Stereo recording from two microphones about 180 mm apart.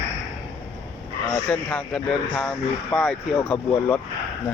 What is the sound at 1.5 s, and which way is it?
Speech, 5° left (ahead or behind).